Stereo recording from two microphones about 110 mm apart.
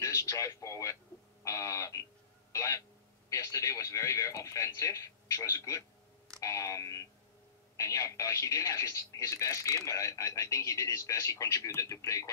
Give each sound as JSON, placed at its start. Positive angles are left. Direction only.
{"t": 0.0, "sound": "speech", "side_deg": 30}